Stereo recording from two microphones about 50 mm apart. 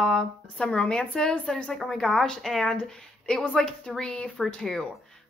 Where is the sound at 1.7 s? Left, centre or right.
Centre.